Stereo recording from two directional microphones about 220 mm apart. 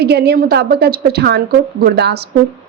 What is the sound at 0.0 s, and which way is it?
A woman's voice, 45° right (ahead or behind).